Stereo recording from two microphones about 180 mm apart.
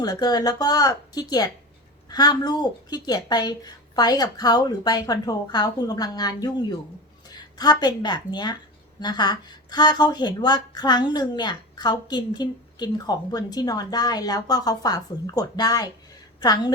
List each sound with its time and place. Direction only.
0.0 s speech: 20° left (ahead or behind)